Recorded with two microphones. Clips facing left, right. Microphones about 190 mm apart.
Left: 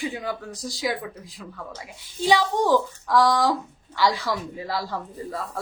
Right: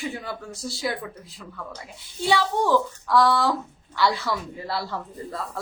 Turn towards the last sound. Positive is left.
turn(degrees=15)  # may be behind; listen again after turning